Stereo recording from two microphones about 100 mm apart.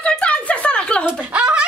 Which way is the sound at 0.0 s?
10° left (ahead or behind).